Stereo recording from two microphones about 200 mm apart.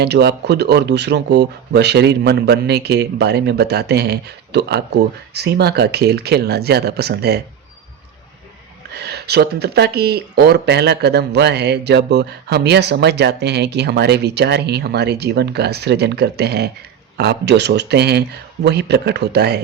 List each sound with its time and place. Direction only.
0.0 s speech: 55° right (ahead or behind)
8.9 s speech: 55° right (ahead or behind)